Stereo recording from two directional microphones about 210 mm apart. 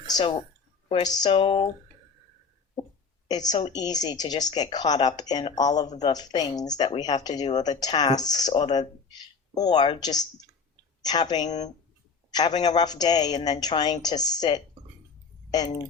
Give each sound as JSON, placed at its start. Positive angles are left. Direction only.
{"t": 0.2, "sound": "speech", "side_deg": 25}
{"t": 3.2, "sound": "speech", "side_deg": 20}